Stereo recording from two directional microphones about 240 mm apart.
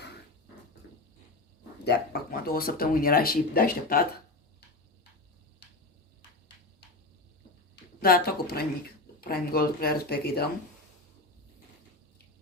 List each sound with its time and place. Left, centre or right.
1.8 s speech: left
8.0 s speech: left